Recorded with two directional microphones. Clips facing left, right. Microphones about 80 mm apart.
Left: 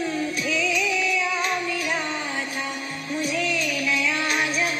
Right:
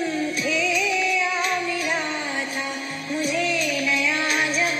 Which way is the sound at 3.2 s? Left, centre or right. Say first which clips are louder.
Right 2 dB; centre.